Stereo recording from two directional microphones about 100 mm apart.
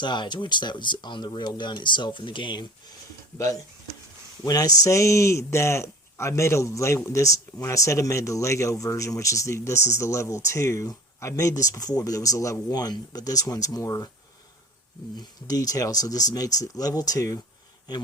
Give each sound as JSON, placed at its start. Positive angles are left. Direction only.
{"t": 0.0, "sound": "speech", "side_deg": 50}
{"t": 3.3, "sound": "speech", "side_deg": 30}
{"t": 15.2, "sound": "speech", "side_deg": 40}